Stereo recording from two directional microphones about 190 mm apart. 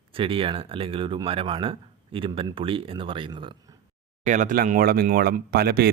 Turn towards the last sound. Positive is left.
turn(degrees=-55)  # may be behind; listen again after turning